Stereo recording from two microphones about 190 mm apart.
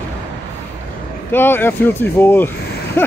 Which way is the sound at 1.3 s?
10° left (ahead or behind).